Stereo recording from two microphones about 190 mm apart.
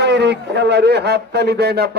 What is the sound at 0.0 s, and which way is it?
A man's voice, 65° right (ahead or behind).